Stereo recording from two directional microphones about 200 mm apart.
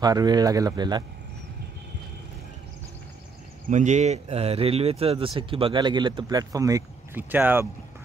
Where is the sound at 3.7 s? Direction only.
35° right (ahead or behind); by 7.7 s 10° right (ahead or behind).